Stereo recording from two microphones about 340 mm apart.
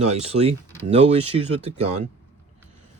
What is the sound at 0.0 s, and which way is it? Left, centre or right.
Speech, centre.